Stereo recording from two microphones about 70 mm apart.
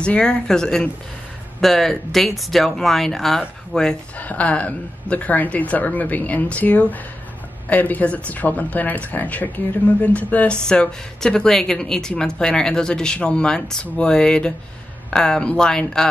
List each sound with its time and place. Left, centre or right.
0.0 s speech: centre
4.2 s speech: left